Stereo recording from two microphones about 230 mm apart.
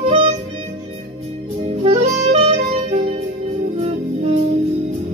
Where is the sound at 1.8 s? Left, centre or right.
Right.